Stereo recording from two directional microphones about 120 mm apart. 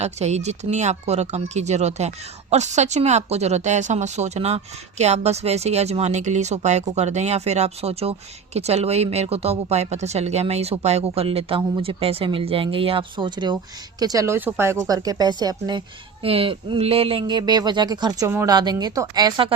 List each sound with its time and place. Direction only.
0.0 s a woman's voice: 70° right (ahead or behind); by 15.8 s 35° right (ahead or behind)
16.2 s speech: 50° right (ahead or behind)